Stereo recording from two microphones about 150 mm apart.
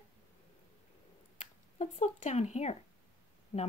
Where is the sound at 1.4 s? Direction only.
50° left (ahead or behind).